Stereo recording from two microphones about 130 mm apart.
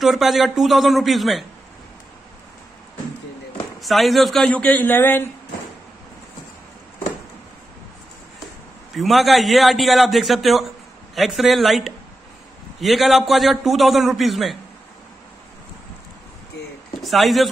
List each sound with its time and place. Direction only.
0.0 s a man's voice: centre (ahead or behind)
3.8 s a man's voice: centre (ahead or behind); by 5.3 s 15° left (ahead or behind)
8.9 s a man's voice: centre (ahead or behind)
17.0 s a man's voice: centre (ahead or behind)